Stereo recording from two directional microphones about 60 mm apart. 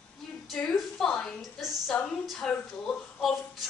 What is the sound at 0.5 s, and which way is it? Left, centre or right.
Speech, centre.